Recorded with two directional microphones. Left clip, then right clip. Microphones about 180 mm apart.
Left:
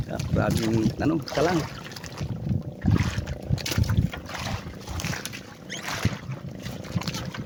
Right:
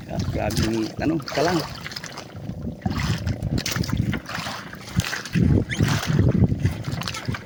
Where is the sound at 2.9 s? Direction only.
40° right (ahead or behind).